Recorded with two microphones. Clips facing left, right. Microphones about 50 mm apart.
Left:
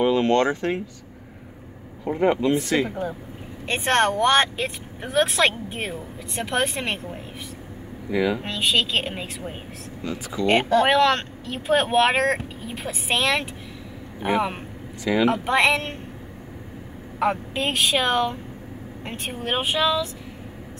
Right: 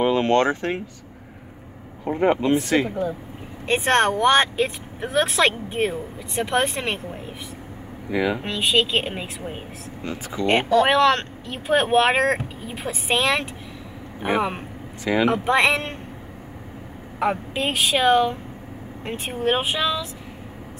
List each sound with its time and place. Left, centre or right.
0.0 s speech: right
2.0 s speech: right
3.6 s speech: centre
8.1 s speech: right
8.4 s speech: centre
10.0 s speech: right
10.4 s speech: centre
10.9 s speech: centre
15.1 s speech: right
15.4 s speech: centre
17.2 s speech: centre